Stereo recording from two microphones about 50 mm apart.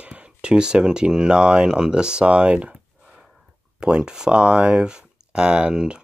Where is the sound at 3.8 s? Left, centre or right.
Centre.